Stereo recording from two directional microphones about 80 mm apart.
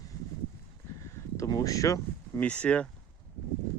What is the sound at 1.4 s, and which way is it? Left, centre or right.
Speech, left.